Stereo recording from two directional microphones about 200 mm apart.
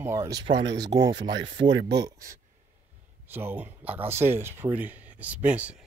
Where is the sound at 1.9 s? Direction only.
20° right (ahead or behind).